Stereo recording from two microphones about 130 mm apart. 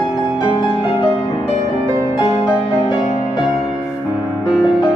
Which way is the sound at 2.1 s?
35° left (ahead or behind).